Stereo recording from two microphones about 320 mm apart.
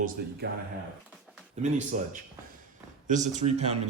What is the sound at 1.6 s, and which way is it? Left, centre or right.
A man's voice, right.